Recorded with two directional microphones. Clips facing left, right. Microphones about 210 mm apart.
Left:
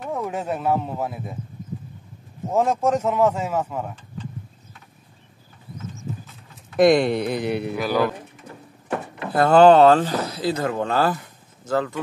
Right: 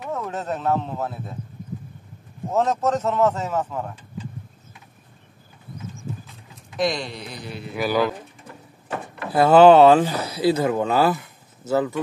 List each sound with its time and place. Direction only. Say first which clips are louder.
0.1 s speech: left 1 dB; 10° left (ahead or behind)
2.5 s speech: left 1 dB; 10° left (ahead or behind)
6.8 s speech: left 9 dB; 55° left (ahead or behind)
7.7 s speech: right 6 dB; 5° right (ahead or behind)
9.3 s speech: right 1 dB; 5° right (ahead or behind)